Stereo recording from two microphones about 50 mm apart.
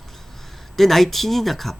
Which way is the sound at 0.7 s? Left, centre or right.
Centre.